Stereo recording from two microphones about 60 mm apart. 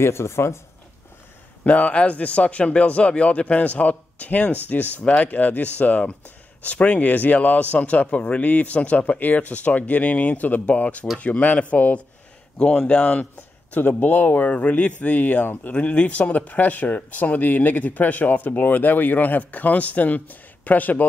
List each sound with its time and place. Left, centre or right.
0.0 s speech: left
1.6 s speech: left
13.4 s speech: left
15.7 s speech: centre